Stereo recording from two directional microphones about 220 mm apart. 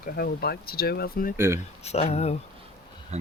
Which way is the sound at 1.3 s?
10° right (ahead or behind).